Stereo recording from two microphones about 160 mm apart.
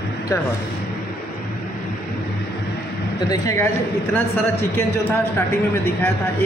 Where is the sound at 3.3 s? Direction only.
20° left (ahead or behind).